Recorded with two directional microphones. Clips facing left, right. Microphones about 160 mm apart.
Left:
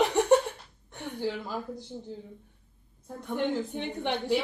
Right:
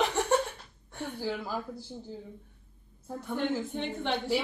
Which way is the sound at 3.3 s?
15° left (ahead or behind).